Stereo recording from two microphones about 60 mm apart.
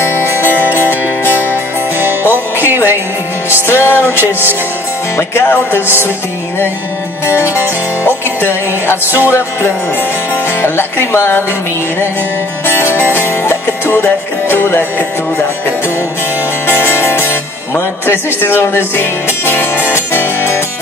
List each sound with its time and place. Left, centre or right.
0.0 s music: left
2.0 s music: right
3.6 s music: left
7.2 s music: left
10.6 s music: left
12.6 s music: left
16.6 s music: left